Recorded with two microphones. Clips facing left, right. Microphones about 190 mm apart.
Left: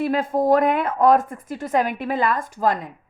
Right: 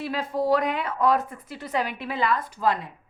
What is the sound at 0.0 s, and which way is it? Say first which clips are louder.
A woman's voice: left 6 dB; 50° left (ahead or behind).